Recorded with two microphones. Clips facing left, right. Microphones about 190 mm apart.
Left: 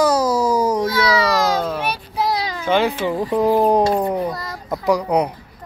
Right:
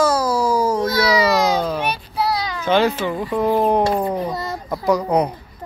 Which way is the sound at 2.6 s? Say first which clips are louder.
Right 1 dB; 10° left (ahead or behind).